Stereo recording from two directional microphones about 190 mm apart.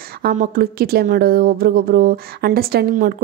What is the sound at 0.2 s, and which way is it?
A woman's voice, 50° right (ahead or behind).